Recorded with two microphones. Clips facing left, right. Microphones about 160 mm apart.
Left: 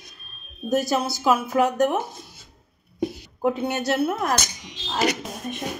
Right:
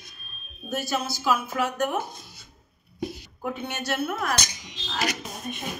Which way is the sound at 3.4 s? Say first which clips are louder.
Left 8 dB; 35° left (ahead or behind).